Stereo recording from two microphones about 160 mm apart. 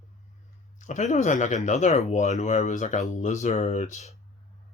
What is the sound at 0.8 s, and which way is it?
Speech, 50° left (ahead or behind).